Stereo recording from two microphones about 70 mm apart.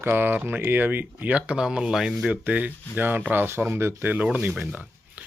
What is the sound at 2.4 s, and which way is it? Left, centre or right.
Speech, right.